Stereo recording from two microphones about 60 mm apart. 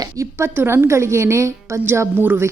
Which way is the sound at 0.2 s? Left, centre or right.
Right.